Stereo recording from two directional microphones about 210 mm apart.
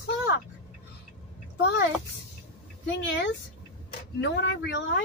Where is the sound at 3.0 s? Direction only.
60° left (ahead or behind).